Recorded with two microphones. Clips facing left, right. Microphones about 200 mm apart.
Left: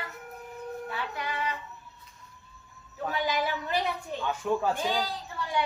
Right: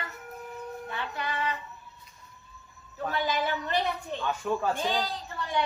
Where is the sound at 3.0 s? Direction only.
10° left (ahead or behind).